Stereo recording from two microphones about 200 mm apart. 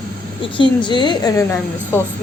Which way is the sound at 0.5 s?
25° left (ahead or behind).